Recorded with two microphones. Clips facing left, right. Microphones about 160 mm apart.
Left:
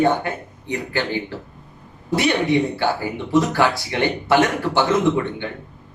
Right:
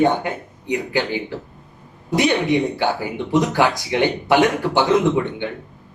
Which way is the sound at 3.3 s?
15° right (ahead or behind).